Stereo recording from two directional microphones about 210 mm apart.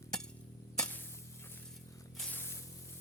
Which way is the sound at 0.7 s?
5° left (ahead or behind).